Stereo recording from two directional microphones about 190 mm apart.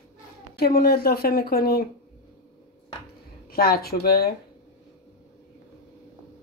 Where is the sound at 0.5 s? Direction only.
55° left (ahead or behind).